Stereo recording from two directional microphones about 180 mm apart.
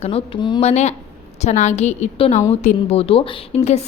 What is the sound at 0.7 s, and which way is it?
A woman's voice, 40° left (ahead or behind).